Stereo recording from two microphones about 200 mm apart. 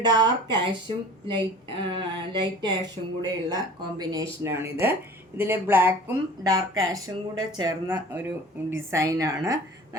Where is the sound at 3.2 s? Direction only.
20° right (ahead or behind).